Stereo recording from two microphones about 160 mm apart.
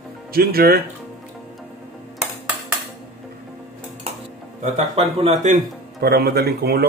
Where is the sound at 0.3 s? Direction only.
70° right (ahead or behind).